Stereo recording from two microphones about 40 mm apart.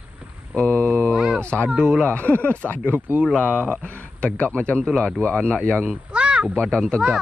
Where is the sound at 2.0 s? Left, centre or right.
Left.